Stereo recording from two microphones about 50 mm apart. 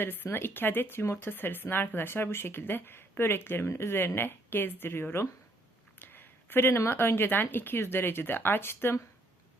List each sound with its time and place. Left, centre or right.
0.0 s speech: left
6.0 s a sound: left
6.9 s speech: left